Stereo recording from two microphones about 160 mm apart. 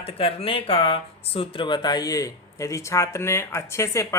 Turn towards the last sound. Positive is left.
turn(degrees=15)  # may be behind; listen again after turning